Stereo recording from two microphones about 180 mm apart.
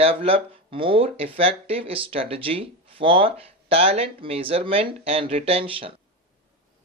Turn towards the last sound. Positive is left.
turn(degrees=-30)  # may be behind; listen again after turning